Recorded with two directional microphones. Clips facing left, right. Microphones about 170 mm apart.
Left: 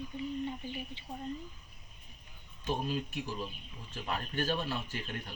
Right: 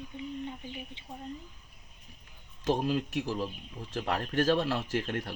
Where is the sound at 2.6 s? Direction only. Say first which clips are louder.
Right 6 dB; 90° right.